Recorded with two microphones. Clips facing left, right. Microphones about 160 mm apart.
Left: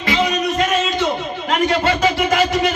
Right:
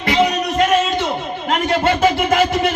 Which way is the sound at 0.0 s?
55° right (ahead or behind).